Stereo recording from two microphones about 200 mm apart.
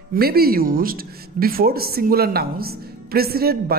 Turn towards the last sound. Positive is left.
turn(degrees=-50)  # may be behind; listen again after turning